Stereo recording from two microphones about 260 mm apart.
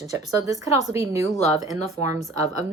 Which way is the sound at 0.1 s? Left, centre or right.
Centre.